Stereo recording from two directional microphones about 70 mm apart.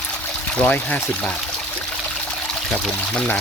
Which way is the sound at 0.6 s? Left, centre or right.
Left.